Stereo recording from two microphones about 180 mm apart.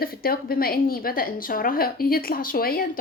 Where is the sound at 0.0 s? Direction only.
55° left (ahead or behind).